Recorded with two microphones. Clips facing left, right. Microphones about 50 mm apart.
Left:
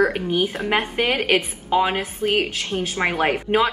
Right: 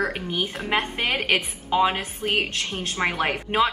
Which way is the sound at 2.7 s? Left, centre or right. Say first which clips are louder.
Left 4 dB; left.